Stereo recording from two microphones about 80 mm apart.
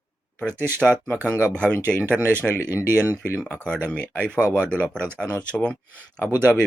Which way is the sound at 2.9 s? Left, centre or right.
Right.